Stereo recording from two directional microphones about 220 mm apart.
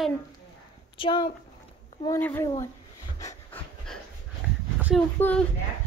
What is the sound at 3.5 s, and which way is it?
Dog, 10° left (ahead or behind).